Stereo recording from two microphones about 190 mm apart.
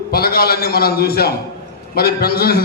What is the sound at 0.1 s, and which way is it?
A man's voice, 55° left (ahead or behind).